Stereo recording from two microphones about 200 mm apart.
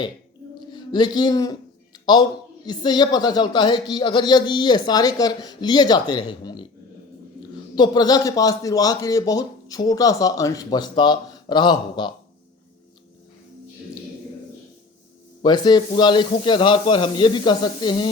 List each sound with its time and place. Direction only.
0.7 s a sound: 20° left (ahead or behind)
2.6 s speech: 20° left (ahead or behind)
7.8 s speech: 20° left (ahead or behind)
15.4 s speech: 20° left (ahead or behind)